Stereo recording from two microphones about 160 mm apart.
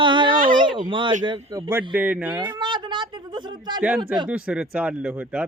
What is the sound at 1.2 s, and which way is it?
Speech, 20° right (ahead or behind).